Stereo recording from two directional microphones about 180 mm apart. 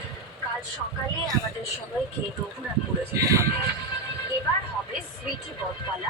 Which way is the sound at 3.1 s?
15° right (ahead or behind).